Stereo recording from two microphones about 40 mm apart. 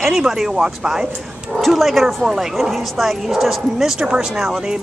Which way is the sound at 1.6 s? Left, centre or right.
Centre.